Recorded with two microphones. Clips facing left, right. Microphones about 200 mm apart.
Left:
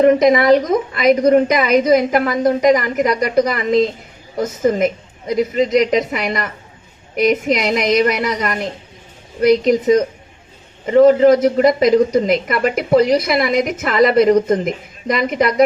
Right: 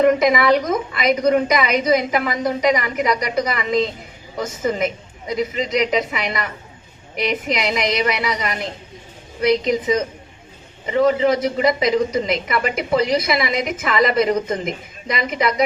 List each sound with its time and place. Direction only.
0.0 s a woman's voice: 40° left (ahead or behind)